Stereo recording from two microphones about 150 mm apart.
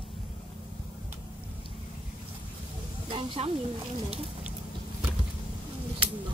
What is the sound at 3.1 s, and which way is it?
Speech, 40° right (ahead or behind).